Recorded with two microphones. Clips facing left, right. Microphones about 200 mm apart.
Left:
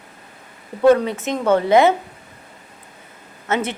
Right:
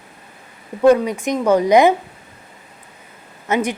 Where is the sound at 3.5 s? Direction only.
15° right (ahead or behind).